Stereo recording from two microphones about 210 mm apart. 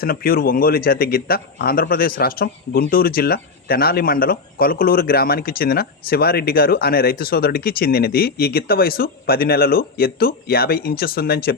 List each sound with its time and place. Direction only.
0.0 s speech: 45° left (ahead or behind)